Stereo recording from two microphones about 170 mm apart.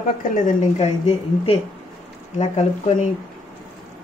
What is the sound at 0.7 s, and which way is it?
Speech, 40° left (ahead or behind).